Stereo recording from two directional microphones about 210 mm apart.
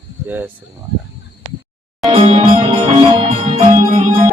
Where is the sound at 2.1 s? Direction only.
30° right (ahead or behind).